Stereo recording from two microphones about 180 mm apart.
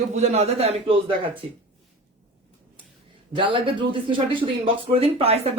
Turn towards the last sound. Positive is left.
turn(degrees=-35)  # may be behind; listen again after turning